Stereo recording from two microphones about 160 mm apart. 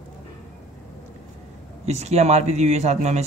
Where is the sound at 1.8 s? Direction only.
45° right (ahead or behind).